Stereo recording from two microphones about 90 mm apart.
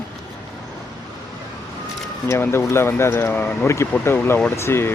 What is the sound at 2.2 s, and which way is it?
Speech, 30° left (ahead or behind).